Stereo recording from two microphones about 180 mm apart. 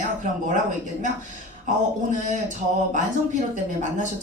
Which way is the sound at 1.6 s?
45° right (ahead or behind).